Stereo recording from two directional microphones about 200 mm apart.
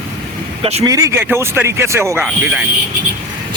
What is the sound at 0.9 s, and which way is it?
Speech, 15° right (ahead or behind).